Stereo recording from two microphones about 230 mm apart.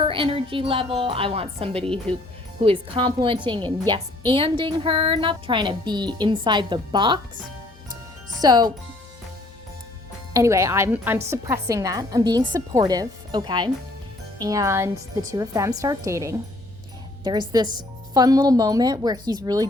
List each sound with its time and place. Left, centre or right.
0.0 s speech: right
8.4 s a woman's voice: centre
10.3 s a woman's voice: centre
17.5 s a woman's voice: centre